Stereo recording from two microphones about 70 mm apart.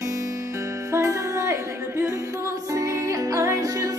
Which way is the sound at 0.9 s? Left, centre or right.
Right.